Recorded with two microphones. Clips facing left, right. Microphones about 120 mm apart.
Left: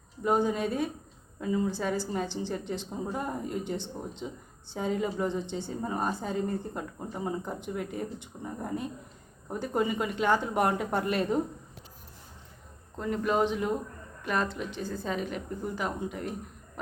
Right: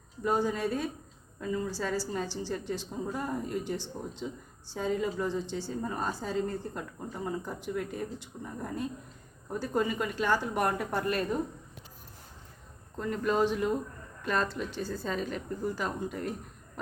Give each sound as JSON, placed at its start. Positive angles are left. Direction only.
{"t": 0.2, "sound": "a woman's voice", "side_deg": 20}
{"t": 13.0, "sound": "a woman's voice", "side_deg": 15}